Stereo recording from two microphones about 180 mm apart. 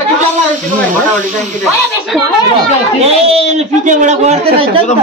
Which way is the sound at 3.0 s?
35° right (ahead or behind).